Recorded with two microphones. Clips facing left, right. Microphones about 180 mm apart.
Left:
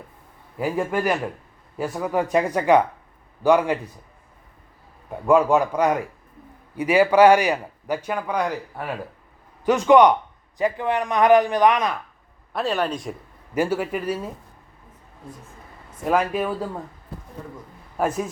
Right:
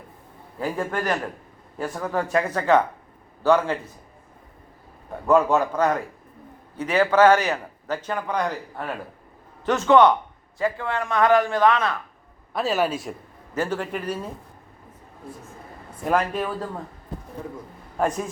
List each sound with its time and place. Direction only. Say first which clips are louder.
0.6 s a man's voice: left 3 dB; 10° left (ahead or behind)
5.2 s a man's voice: left 2 dB; 10° left (ahead or behind)
12.5 s speech: right 1 dB; 5° right (ahead or behind)
13.5 s a man's voice: left 3 dB; 10° left (ahead or behind)
16.0 s speech: left 2 dB; 5° left (ahead or behind)
17.9 s a man's voice: left 1 dB; 5° left (ahead or behind)